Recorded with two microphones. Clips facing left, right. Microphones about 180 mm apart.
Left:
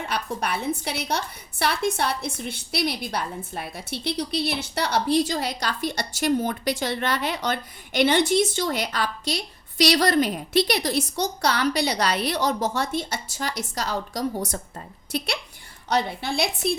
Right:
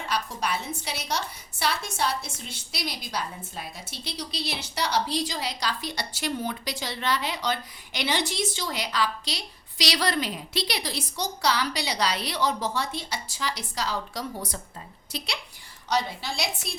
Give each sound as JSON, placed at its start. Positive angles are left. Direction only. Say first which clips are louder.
{"t": 0.1, "sound": "a woman's voice", "louder": "even", "side_deg": 55}
{"t": 15.9, "sound": "a woman's voice", "louder": "left 3 dB", "side_deg": 55}